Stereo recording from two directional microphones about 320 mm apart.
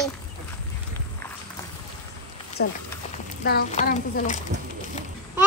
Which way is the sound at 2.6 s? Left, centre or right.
Left.